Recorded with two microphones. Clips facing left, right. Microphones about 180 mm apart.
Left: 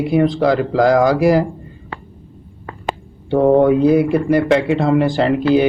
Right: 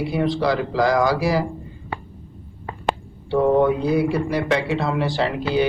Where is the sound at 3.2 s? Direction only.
50° left (ahead or behind).